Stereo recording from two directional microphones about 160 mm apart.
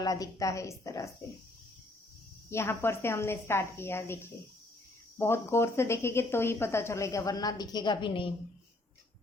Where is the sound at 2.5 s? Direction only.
15° left (ahead or behind); by 8.3 s 30° left (ahead or behind).